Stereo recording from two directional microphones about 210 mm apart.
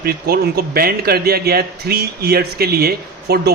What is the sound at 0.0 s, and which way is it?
A man's voice, 45° right (ahead or behind).